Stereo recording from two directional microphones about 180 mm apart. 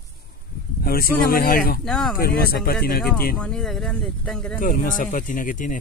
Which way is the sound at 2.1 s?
55° left (ahead or behind).